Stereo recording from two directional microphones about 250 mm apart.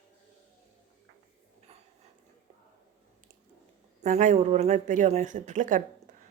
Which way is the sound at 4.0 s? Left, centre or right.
Right.